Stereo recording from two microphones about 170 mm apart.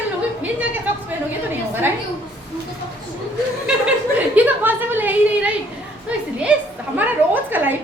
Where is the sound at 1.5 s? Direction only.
10° right (ahead or behind).